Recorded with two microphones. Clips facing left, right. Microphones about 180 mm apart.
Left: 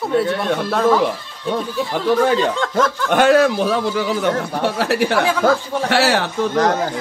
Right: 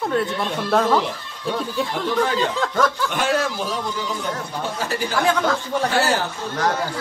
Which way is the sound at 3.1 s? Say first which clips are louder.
Left 9 dB; 65° left (ahead or behind).